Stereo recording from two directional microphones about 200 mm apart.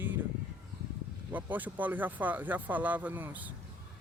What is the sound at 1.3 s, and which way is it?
Speech, 10° right (ahead or behind).